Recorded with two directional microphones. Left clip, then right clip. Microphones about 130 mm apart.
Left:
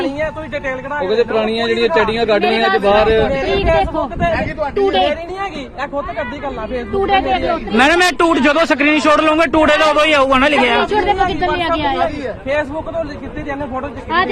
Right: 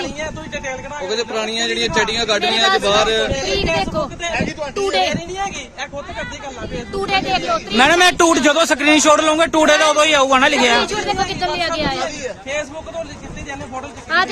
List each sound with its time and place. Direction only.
1.0 s speech: 35° right (ahead or behind)
4.8 s a man's voice: 50° right (ahead or behind)
7.0 s a man's voice: 60° right (ahead or behind); by 8.4 s 35° right (ahead or behind)
8.4 s a man's voice: 60° right (ahead or behind)
10.5 s speech: 35° right (ahead or behind)